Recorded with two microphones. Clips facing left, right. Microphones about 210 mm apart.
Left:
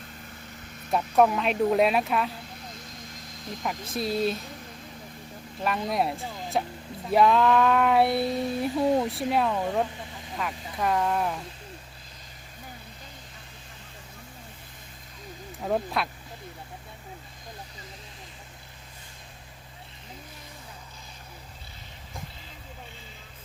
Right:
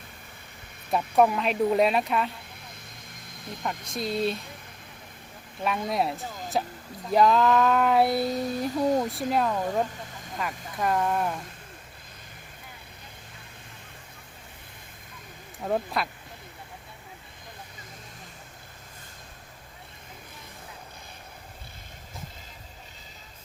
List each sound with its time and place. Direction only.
0.9 s child singing: centre (ahead or behind)
2.7 s vehicle: 55° right (ahead or behind)
3.6 s child singing: 5° left (ahead or behind)
5.6 s child singing: centre (ahead or behind)
15.6 s child singing: centre (ahead or behind)